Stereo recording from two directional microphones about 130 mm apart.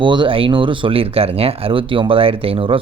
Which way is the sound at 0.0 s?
40° right (ahead or behind).